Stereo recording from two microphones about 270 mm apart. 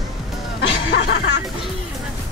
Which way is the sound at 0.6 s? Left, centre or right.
Left.